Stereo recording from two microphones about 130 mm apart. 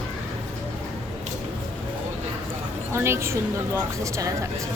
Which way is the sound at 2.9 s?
20° right (ahead or behind).